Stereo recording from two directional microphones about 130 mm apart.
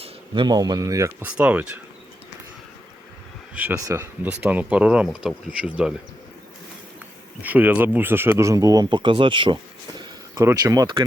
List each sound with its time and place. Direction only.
0.0 s speech: 35° right (ahead or behind)
1.2 s speech: 10° right (ahead or behind)
3.5 s speech: 10° right (ahead or behind)
7.4 s speech: 15° right (ahead or behind); by 10.9 s 30° right (ahead or behind)